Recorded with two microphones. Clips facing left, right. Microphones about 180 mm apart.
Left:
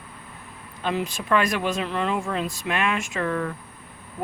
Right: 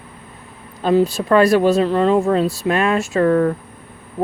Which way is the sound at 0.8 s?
35° right (ahead or behind).